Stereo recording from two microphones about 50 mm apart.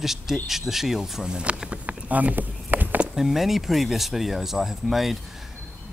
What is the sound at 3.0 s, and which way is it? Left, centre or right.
Speech, centre.